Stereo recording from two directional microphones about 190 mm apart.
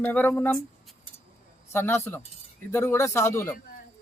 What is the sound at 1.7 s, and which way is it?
Speech, 10° left (ahead or behind).